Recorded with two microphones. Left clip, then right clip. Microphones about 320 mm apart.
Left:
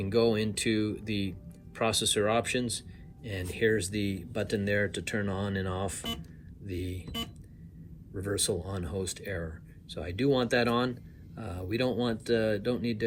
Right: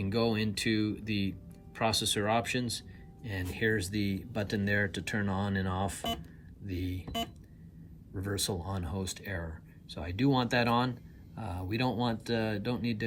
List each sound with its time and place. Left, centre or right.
0.0 s speech: right
8.1 s speech: right